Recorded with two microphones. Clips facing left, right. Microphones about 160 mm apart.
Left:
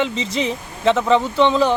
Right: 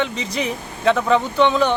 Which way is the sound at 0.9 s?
Centre (ahead or behind).